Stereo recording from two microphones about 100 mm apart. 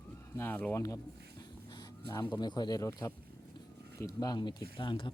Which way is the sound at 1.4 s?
40° left (ahead or behind).